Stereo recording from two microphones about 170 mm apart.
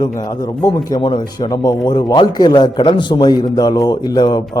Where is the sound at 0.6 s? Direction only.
25° left (ahead or behind).